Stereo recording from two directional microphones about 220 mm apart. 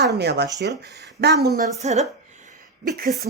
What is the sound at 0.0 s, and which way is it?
Speech, 50° right (ahead or behind).